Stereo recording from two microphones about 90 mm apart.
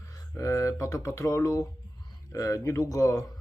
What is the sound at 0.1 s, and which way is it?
Speech, 40° left (ahead or behind).